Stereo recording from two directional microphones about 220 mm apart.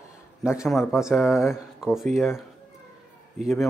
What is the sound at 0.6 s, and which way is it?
Speech, centre (ahead or behind).